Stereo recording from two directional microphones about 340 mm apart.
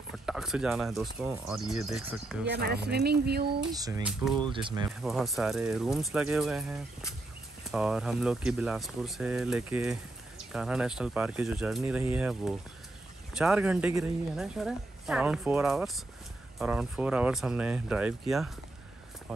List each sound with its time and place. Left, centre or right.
0.1 s speech: centre
2.4 s speech: right
3.7 s speech: centre
4.5 s speech: centre
5.0 s speech: centre